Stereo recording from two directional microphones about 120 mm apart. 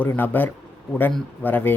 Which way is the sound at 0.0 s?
15° left (ahead or behind).